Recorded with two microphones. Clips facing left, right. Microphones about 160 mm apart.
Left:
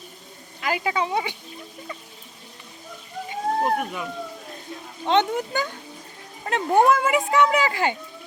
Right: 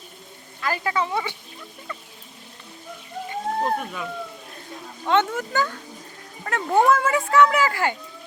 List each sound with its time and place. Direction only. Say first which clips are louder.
0.6 s a child's voice: even; 15° left (ahead or behind)
3.6 s a child's voice: left 1 dB; 10° left (ahead or behind)
5.0 s a child's voice: left 1 dB; 20° left (ahead or behind)